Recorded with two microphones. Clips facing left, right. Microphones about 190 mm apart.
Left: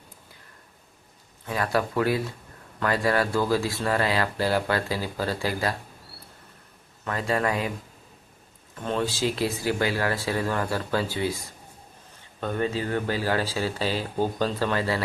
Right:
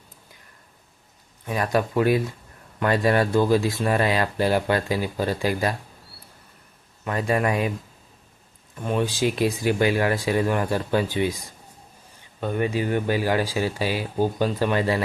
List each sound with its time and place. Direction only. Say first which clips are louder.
1.5 s speech: right 2 dB; 20° right (ahead or behind)
7.0 s speech: right 3 dB; 15° right (ahead or behind)
8.8 s speech: right 3 dB; 10° right (ahead or behind)